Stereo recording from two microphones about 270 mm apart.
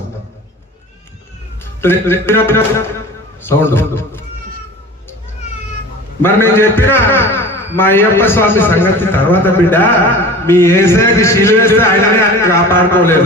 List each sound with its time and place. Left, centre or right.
1.8 s a man's voice: centre
6.2 s a man's voice: centre